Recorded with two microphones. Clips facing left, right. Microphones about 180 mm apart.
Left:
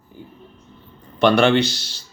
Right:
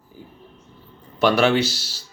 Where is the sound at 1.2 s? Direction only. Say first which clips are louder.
Left 2 dB; 5° right (ahead or behind).